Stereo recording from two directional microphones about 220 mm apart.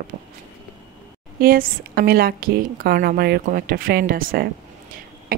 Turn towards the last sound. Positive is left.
turn(degrees=-40)  # may be behind; listen again after turning